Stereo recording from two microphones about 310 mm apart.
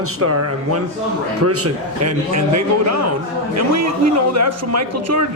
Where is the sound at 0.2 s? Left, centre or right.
Right.